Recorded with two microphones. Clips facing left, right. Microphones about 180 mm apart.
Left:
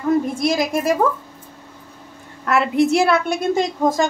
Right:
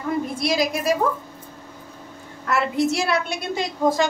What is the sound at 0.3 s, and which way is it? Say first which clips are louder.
Speech: left 3 dB; 45° left (ahead or behind).